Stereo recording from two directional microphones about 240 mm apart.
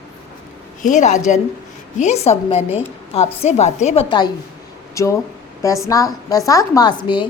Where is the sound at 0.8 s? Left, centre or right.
Left.